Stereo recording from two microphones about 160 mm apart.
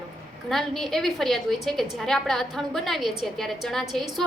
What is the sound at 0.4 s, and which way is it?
A woman's voice, centre (ahead or behind).